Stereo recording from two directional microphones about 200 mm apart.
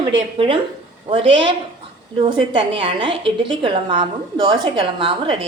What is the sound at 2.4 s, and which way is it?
A woman's voice, 25° right (ahead or behind).